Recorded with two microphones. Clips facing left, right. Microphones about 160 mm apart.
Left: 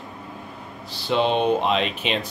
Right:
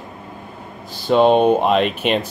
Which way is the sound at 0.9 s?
45° right (ahead or behind).